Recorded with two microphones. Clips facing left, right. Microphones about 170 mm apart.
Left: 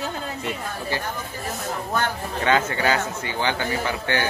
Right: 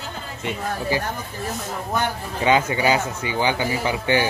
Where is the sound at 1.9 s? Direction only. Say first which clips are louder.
Right 1 dB; 15° right (ahead or behind).